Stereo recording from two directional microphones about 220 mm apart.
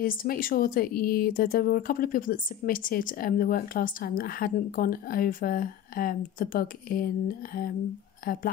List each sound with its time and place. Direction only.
0.0 s speech: 40° left (ahead or behind)